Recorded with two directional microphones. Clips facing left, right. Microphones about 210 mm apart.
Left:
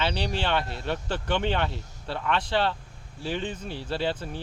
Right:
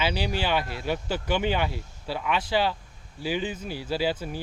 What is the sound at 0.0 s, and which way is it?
Speech, 5° right (ahead or behind).